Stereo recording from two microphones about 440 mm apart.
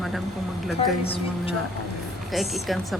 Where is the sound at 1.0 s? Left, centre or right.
Centre.